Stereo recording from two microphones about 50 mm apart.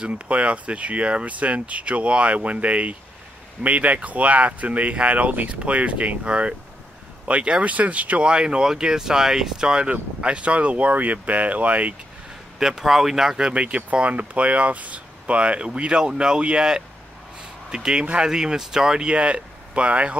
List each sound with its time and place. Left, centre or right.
0.0 s speech: right
12.5 s speech: centre
13.5 s speech: right